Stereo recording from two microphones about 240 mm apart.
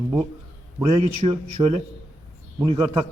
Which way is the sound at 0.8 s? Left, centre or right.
Right.